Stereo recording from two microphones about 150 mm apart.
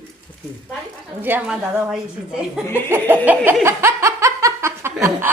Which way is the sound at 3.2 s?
15° right (ahead or behind).